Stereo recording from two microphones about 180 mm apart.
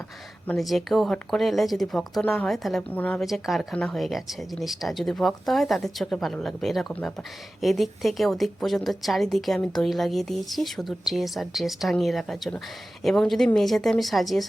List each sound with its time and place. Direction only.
0.4 s speech: centre (ahead or behind)